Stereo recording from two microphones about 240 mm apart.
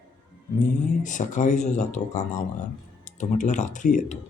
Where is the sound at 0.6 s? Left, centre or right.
Left.